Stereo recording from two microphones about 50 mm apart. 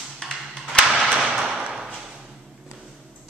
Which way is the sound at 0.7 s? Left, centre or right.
Left.